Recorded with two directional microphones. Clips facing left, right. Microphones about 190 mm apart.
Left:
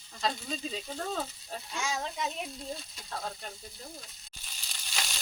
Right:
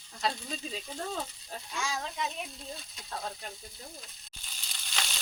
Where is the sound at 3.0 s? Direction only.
Centre (ahead or behind).